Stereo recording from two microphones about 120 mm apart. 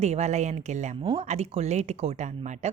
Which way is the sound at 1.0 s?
60° right (ahead or behind).